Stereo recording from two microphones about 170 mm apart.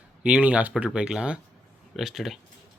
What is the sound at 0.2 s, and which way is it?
Speech, 5° right (ahead or behind).